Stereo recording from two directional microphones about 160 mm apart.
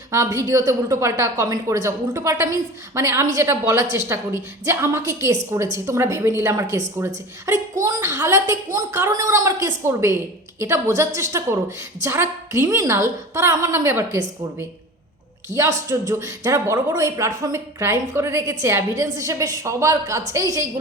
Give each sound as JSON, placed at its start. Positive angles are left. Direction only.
{"t": 0.1, "sound": "a woman's voice", "side_deg": -20}
{"t": 15.5, "sound": "a man's voice", "side_deg": 10}
{"t": 15.9, "sound": "speech", "side_deg": -20}